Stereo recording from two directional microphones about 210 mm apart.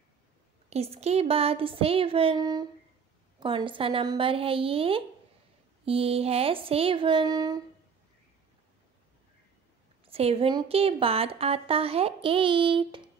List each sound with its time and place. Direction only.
0.7 s a woman's voice: 30° right (ahead or behind)
10.0 s a woman's voice: 30° right (ahead or behind)